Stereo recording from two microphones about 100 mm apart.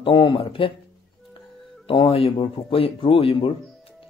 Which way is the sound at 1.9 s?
65° left (ahead or behind).